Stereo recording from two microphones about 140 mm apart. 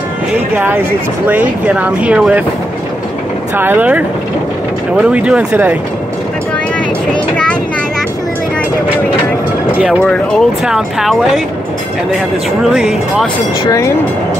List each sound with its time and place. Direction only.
0.6 s speech: 15° right (ahead or behind)
3.5 s speech: 15° right (ahead or behind)
10.0 s speech: centre (ahead or behind)
12.7 s speech: centre (ahead or behind)
13.7 s speech: 20° left (ahead or behind)